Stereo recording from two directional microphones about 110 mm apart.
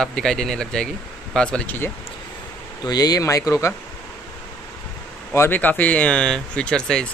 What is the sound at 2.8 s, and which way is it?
Speech, 35° left (ahead or behind).